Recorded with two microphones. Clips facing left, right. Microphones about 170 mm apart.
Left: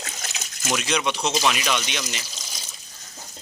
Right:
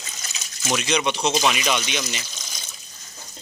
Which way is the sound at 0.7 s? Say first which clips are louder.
Right 2 dB; centre (ahead or behind).